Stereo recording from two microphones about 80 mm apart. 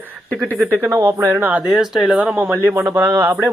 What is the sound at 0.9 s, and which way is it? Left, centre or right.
Speech, right.